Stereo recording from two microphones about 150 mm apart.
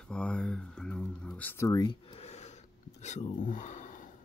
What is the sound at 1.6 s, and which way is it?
Speech, 25° left (ahead or behind).